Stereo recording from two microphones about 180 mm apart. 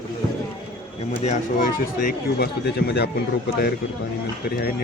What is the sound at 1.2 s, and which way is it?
Speech, 50° left (ahead or behind).